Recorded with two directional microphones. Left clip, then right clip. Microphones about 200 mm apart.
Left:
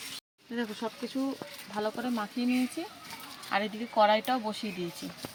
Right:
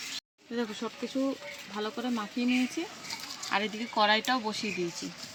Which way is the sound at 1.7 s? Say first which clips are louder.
Left 2 dB; 25° left (ahead or behind).